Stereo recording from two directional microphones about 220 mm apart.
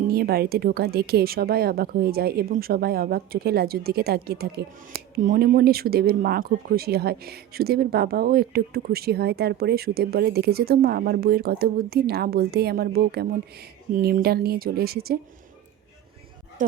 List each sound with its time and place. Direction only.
0.1 s a woman's voice: 45° right (ahead or behind)
16.6 s speech: 40° right (ahead or behind)